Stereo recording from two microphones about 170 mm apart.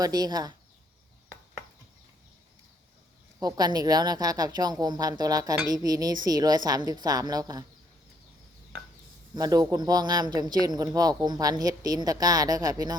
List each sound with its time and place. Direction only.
0.0 s a woman's voice: 25° right (ahead or behind)
3.4 s a woman's voice: 25° right (ahead or behind)
9.3 s a woman's voice: 20° right (ahead or behind)